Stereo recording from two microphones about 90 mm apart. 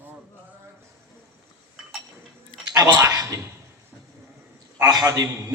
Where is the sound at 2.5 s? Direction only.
70° left (ahead or behind).